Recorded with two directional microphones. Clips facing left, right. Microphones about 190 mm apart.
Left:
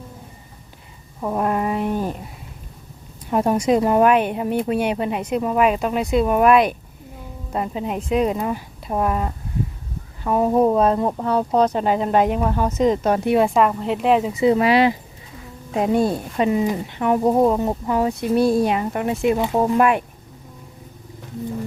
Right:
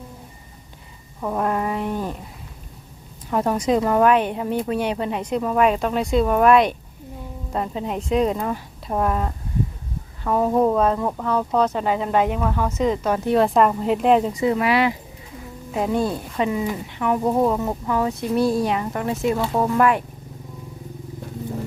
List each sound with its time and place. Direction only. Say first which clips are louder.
1.2 s speech: left 1 dB; 15° left (ahead or behind)
3.2 s speech: left 2 dB; 15° left (ahead or behind); by 12.4 s 35° left (ahead or behind)
12.4 s speech: left 2 dB; 20° left (ahead or behind)
12.8 s speech: left 4 dB; 40° left (ahead or behind)
13.3 s speech: right 2 dB; 5° left (ahead or behind)
14.4 s speech: left 4 dB; 25° left (ahead or behind)